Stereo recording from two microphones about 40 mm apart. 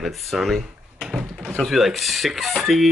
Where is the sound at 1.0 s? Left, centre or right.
Centre.